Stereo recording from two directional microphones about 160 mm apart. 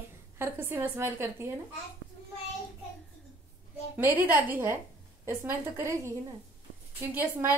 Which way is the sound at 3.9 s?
10° right (ahead or behind).